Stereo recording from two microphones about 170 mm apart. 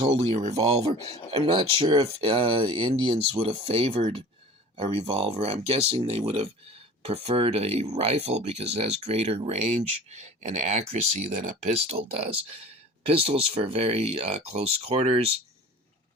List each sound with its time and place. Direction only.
0.0 s speech: 40° right (ahead or behind)